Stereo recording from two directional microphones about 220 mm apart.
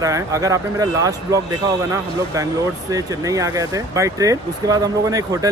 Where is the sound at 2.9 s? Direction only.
15° right (ahead or behind).